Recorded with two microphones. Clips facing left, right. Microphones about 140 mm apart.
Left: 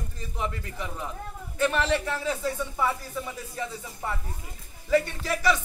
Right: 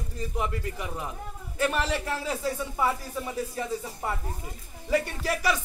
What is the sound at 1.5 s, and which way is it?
Speech, 5° right (ahead or behind).